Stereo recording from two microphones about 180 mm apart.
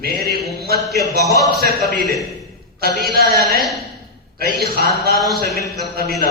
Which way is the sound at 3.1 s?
60° right (ahead or behind).